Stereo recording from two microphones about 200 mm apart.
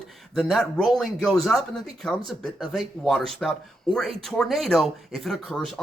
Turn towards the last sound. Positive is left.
turn(degrees=0)  # may be behind; listen again after turning